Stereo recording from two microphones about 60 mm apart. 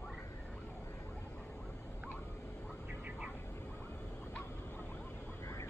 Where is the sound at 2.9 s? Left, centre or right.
Right.